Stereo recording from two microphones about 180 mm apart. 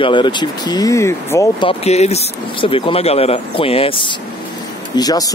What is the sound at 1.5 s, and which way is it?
Speech, 35° left (ahead or behind).